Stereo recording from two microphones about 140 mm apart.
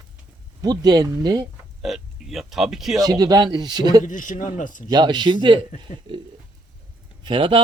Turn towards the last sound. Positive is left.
turn(degrees=-35)  # may be behind; listen again after turning